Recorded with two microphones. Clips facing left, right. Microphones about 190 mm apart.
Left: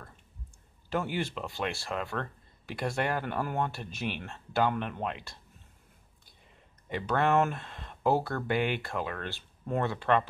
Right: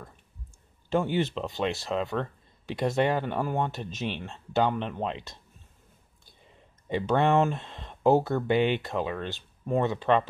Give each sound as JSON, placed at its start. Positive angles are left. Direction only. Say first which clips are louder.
{"t": 1.1, "sound": "speech", "louder": "right 6 dB", "side_deg": -20}
{"t": 6.9, "sound": "speech", "louder": "right 4 dB", "side_deg": -25}